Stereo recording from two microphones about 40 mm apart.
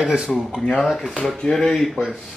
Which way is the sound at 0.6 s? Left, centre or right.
Centre.